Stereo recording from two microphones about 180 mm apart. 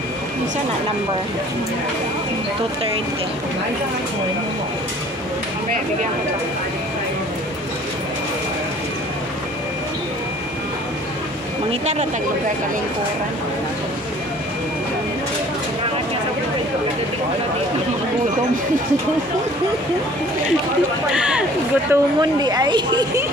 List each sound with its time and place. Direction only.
11.8 s speech: 40° right (ahead or behind)
21.1 s speech: 5° right (ahead or behind); by 23.2 s 25° right (ahead or behind)